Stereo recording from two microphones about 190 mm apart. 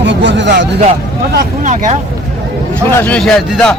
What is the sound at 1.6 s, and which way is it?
Speech, 40° right (ahead or behind).